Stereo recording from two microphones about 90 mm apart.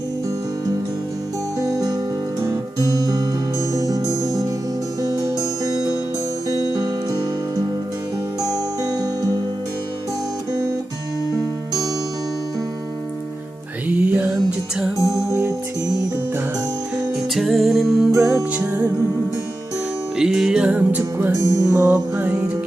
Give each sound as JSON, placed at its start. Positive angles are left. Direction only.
{"t": 1.5, "sound": "music", "side_deg": -40}
{"t": 2.4, "sound": "guitar", "side_deg": -40}
{"t": 3.8, "sound": "music", "side_deg": -40}
{"t": 6.7, "sound": "music", "side_deg": -45}
{"t": 10.5, "sound": "music", "side_deg": -40}
{"t": 13.8, "sound": "music", "side_deg": -20}
{"t": 15.0, "sound": "music", "side_deg": -35}
{"t": 17.3, "sound": "music", "side_deg": 0}
{"t": 18.1, "sound": "music", "side_deg": -35}
{"t": 20.1, "sound": "music", "side_deg": -5}
{"t": 21.4, "sound": "music", "side_deg": -40}
{"t": 22.2, "sound": "music", "side_deg": -15}